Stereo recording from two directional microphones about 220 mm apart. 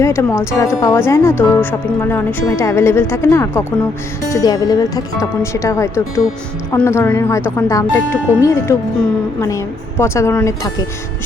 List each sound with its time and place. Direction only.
0.0 s speech: 10° left (ahead or behind)